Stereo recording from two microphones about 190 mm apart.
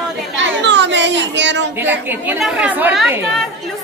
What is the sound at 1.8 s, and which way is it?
A woman's voice, 10° right (ahead or behind).